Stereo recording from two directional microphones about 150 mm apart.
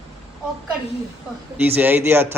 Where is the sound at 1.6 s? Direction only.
10° right (ahead or behind).